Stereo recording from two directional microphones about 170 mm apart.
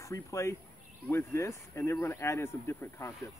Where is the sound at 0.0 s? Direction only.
20° left (ahead or behind).